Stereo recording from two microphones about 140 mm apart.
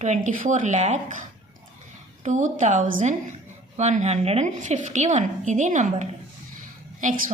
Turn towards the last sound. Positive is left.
turn(degrees=-65)  # may be behind; listen again after turning